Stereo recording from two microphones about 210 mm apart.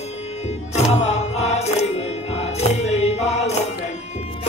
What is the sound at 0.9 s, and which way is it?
Music, 30° left (ahead or behind).